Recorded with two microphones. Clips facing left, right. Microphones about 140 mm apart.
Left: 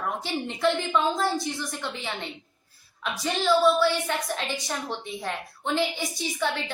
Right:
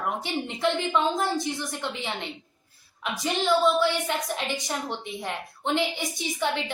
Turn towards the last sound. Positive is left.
turn(degrees=-20)  # may be behind; listen again after turning